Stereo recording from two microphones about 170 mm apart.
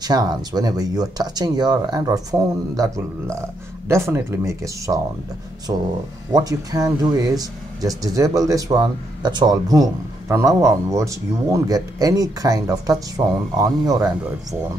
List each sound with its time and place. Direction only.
0.0 s speech: 25° right (ahead or behind)